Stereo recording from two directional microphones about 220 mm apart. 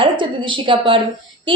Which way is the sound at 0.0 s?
20° right (ahead or behind).